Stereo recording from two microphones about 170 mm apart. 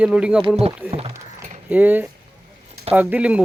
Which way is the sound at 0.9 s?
35° right (ahead or behind).